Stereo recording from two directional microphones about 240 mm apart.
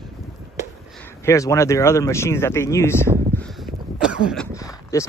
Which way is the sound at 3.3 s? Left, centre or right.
Centre.